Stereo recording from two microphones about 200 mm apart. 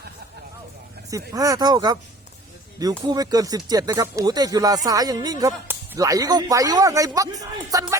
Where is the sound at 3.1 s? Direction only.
20° right (ahead or behind).